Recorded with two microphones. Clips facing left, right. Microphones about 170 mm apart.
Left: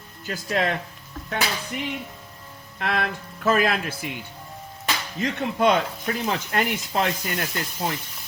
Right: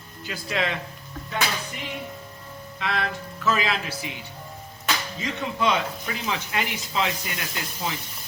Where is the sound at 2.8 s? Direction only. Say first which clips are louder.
Left 2 dB; 55° left (ahead or behind).